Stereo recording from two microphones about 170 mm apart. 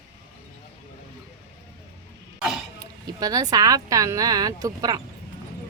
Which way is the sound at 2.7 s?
20° right (ahead or behind).